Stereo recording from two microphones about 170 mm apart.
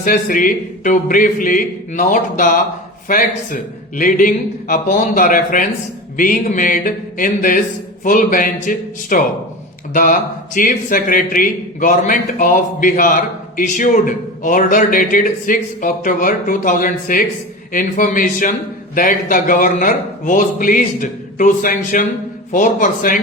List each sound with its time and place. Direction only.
0.0 s a man's voice: 55° left (ahead or behind)